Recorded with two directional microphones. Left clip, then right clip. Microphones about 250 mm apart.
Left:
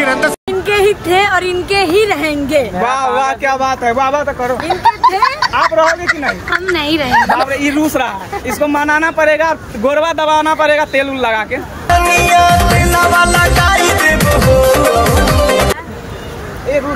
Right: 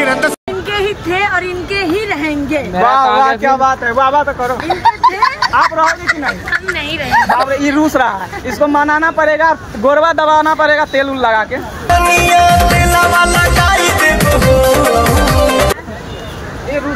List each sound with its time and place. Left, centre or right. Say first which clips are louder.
0.0 s a sound: even; centre
0.7 s speech: left 5 dB; centre
3.2 s a man's voice: right 3 dB; centre
6.8 s speech: left 4 dB; left
7.1 s a man's voice: right 2 dB; centre
11.9 s music: even; centre